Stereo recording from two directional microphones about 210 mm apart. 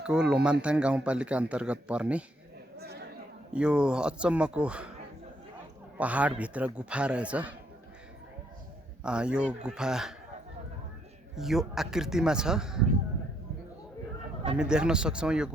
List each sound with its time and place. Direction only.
0.0 s speech: 5° right (ahead or behind)
2.7 s chatter: 50° right (ahead or behind)
3.5 s speech: 5° right (ahead or behind)
6.0 s a man's voice: 5° right (ahead or behind)
9.0 s speech: 5° right (ahead or behind)
11.3 s speech: centre (ahead or behind)
14.6 s speech: 5° right (ahead or behind)